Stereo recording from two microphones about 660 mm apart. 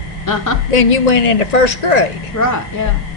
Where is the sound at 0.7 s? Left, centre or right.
Left.